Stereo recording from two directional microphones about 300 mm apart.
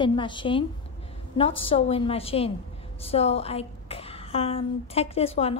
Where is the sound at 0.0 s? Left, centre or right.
Centre.